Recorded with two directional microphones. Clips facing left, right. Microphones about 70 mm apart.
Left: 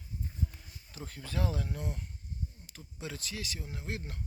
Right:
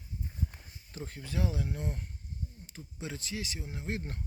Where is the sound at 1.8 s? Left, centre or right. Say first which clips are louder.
Right 2 dB; right.